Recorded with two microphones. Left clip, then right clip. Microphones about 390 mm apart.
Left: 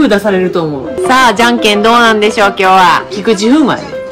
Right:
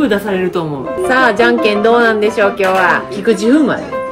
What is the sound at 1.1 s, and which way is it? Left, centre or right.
Speech, centre.